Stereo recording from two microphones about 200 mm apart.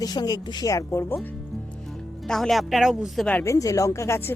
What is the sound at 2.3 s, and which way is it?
Speech, centre (ahead or behind).